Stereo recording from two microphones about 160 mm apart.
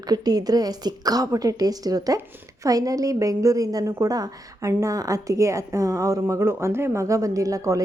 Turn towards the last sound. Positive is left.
turn(degrees=-20)  # may be behind; listen again after turning